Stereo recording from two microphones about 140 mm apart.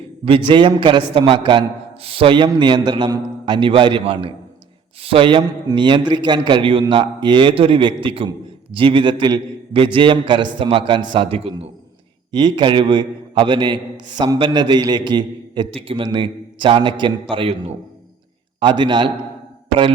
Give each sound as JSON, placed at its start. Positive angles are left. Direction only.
{"t": 0.3, "sound": "a man's voice", "side_deg": -35}
{"t": 12.3, "sound": "a man's voice", "side_deg": -35}